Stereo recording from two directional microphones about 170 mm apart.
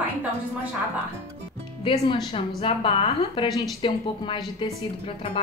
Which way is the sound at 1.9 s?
35° left (ahead or behind).